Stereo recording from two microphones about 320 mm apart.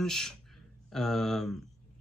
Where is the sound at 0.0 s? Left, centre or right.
Centre.